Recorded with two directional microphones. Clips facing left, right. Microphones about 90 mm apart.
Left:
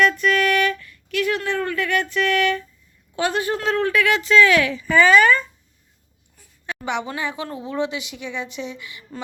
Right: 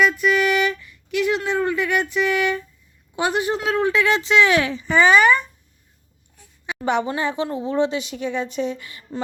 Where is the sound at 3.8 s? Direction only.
25° right (ahead or behind).